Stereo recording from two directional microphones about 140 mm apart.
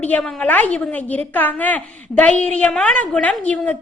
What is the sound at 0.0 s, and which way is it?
A woman's voice, 5° left (ahead or behind).